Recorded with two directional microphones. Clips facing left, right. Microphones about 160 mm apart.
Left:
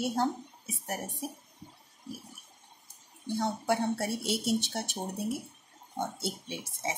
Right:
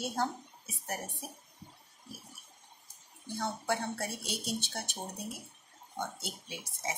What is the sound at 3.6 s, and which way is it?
Speech, 25° left (ahead or behind).